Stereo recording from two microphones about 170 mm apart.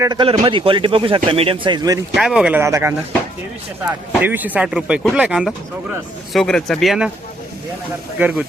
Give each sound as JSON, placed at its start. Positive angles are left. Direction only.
{"t": 0.0, "sound": "speech", "side_deg": -25}
{"t": 2.1, "sound": "speech", "side_deg": 0}
{"t": 4.2, "sound": "speech", "side_deg": -10}
{"t": 8.2, "sound": "speech", "side_deg": -10}